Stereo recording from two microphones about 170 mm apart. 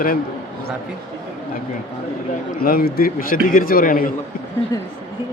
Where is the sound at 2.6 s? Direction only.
60° left (ahead or behind).